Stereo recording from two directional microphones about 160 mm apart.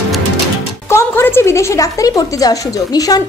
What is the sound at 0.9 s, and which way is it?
A woman's voice, 15° left (ahead or behind).